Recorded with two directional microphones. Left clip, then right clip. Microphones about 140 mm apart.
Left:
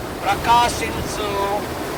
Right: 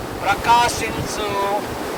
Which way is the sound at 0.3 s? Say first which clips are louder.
Right 1 dB; 20° right (ahead or behind).